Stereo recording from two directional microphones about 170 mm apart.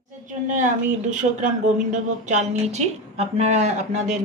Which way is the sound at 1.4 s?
45° right (ahead or behind).